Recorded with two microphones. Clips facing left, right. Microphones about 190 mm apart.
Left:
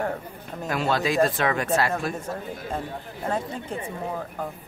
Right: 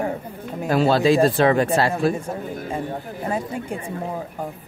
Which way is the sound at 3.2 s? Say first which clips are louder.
Right 2 dB; 10° right (ahead or behind).